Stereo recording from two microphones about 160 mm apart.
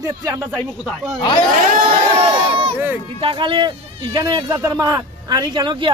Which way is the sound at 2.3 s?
35° right (ahead or behind).